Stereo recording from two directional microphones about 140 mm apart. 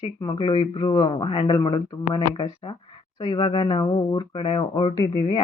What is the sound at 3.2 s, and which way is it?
Speech, 30° left (ahead or behind).